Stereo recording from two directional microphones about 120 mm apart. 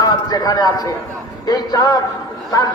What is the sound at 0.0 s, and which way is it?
A man's voice, 35° left (ahead or behind).